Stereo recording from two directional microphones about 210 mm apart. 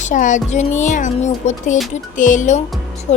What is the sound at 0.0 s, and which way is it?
Speech, 35° left (ahead or behind).